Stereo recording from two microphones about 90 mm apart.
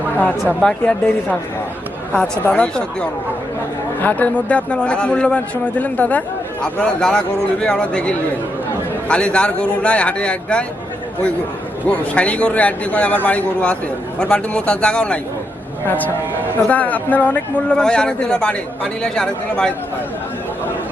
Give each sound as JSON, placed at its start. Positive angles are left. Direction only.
{"t": 0.2, "sound": "a man's voice", "side_deg": 20}
{"t": 11.9, "sound": "a man's voice", "side_deg": 15}